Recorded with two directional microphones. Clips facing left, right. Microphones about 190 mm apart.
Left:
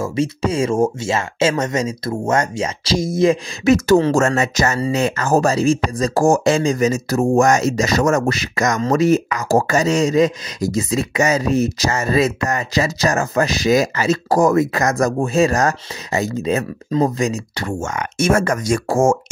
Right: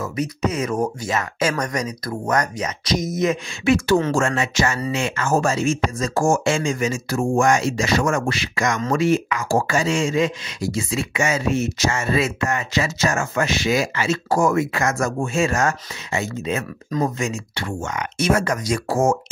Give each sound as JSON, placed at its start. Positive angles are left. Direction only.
{"t": 0.0, "sound": "speech", "side_deg": 30}